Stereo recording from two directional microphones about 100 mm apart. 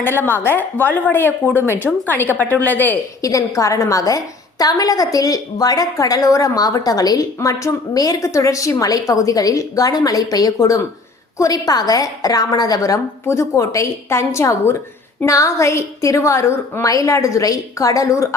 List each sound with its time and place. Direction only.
0.0 s a woman's voice: 20° left (ahead or behind)
3.2 s a woman's voice: 35° left (ahead or behind)